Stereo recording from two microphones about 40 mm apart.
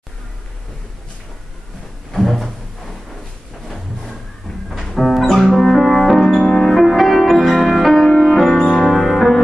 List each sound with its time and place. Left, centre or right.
2.1 s music: centre
3.6 s a sound: centre
4.6 s music: centre
8.5 s music: centre
8.9 s music: centre